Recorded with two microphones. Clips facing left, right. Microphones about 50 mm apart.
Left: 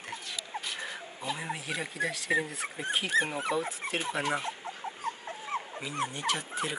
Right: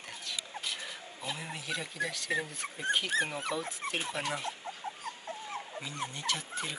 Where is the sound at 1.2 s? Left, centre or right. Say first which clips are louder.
Left 4 dB; centre.